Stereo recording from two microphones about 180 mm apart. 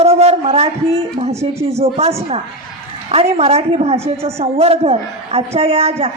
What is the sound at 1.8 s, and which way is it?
A man's voice, 35° right (ahead or behind).